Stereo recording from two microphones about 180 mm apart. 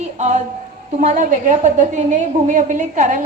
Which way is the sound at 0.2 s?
40° right (ahead or behind).